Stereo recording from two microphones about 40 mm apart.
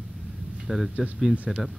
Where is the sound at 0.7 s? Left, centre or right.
Right.